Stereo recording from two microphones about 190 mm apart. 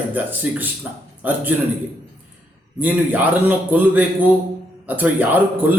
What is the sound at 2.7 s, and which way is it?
Speech, 10° right (ahead or behind).